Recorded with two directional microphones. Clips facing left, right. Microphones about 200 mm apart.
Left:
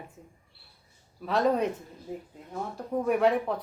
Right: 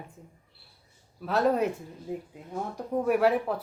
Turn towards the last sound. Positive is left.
turn(degrees=-5)  # may be behind; listen again after turning